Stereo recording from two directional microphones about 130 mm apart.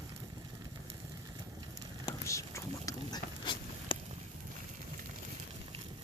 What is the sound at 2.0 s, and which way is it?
Whispering, 25° left (ahead or behind).